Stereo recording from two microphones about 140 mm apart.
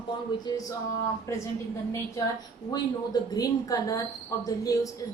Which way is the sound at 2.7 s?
25° left (ahead or behind).